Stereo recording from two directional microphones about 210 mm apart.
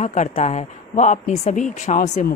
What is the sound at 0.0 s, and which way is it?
A woman's voice, 35° left (ahead or behind).